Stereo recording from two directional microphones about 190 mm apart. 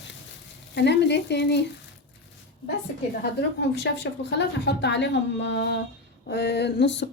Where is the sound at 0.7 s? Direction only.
65° left (ahead or behind).